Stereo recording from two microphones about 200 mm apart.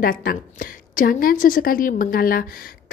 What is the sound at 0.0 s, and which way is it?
Speech, 45° left (ahead or behind).